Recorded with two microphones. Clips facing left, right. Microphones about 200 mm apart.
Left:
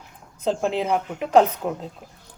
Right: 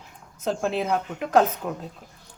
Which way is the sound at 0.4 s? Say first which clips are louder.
Left 2 dB; 15° left (ahead or behind).